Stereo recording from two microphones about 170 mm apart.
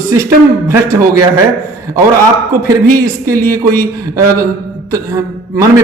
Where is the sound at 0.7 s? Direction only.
15° right (ahead or behind).